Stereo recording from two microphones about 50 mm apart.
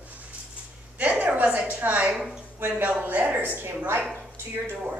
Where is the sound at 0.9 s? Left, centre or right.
Right.